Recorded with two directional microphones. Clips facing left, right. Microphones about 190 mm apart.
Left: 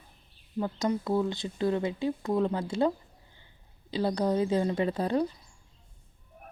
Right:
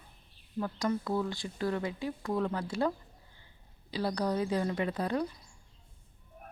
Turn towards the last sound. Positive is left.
turn(degrees=30)  # may be behind; listen again after turning